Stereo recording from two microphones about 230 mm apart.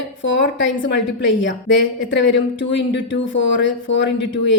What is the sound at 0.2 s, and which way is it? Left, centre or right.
Speech, left.